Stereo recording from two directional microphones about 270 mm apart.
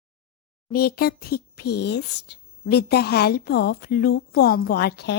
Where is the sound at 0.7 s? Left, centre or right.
Left.